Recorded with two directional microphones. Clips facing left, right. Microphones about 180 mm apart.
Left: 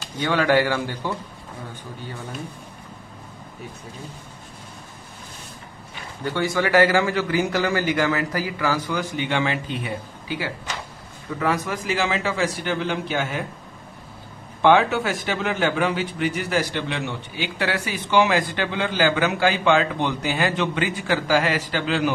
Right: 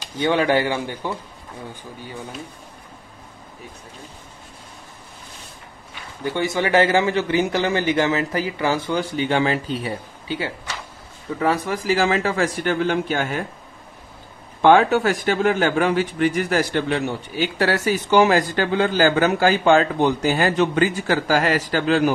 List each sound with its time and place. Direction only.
0.2 s a man's voice: 20° right (ahead or behind)
6.2 s a man's voice: 20° right (ahead or behind); by 13.4 s 50° right (ahead or behind)
14.6 s a man's voice: 45° right (ahead or behind)